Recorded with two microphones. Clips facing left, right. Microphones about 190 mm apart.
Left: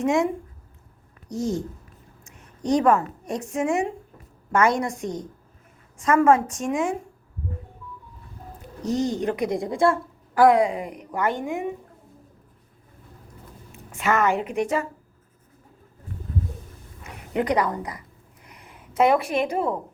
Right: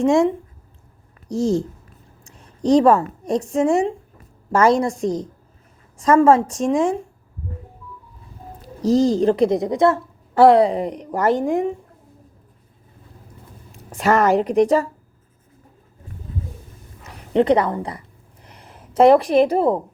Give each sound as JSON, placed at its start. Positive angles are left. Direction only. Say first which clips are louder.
{"t": 0.0, "sound": "a woman's voice", "louder": "right 6 dB", "side_deg": -30}
{"t": 8.6, "sound": "a woman's voice", "louder": "right 8 dB", "side_deg": -35}
{"t": 13.7, "sound": "a woman's voice", "louder": "right 5 dB", "side_deg": -35}
{"t": 17.3, "sound": "a woman's voice", "louder": "right 7 dB", "side_deg": -25}